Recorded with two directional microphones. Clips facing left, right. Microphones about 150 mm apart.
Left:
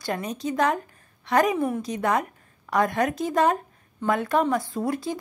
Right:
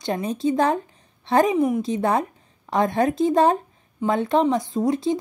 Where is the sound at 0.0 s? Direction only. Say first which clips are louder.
Right 5 dB; 25° right (ahead or behind).